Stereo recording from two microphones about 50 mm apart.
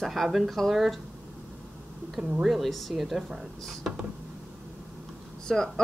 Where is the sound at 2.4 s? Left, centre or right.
Centre.